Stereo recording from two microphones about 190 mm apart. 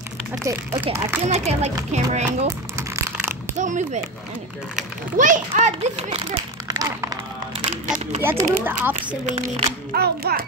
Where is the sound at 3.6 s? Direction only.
40° right (ahead or behind).